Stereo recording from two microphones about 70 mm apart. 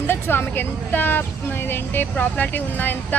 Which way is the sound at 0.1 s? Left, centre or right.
Left.